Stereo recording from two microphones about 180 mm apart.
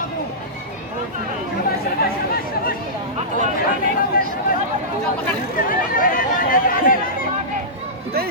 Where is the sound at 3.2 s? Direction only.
45° right (ahead or behind).